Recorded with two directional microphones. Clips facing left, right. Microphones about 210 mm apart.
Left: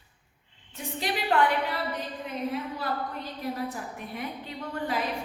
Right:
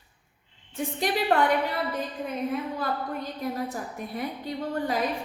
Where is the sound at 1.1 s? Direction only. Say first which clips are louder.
Right 3 dB; 45° right (ahead or behind).